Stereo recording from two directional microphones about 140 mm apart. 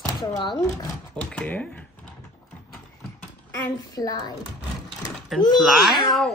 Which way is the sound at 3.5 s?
25° left (ahead or behind).